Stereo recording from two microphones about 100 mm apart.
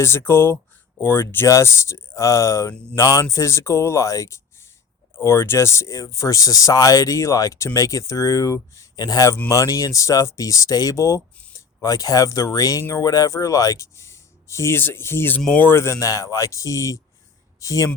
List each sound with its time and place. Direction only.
0.0 s speech: 25° left (ahead or behind)
15.4 s speech: 5° left (ahead or behind)
15.6 s speech: 25° left (ahead or behind)